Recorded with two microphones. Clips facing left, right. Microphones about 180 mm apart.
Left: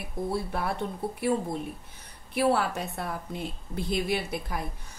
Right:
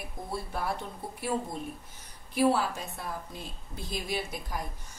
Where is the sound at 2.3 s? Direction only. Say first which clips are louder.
Left 1 dB; 60° left (ahead or behind).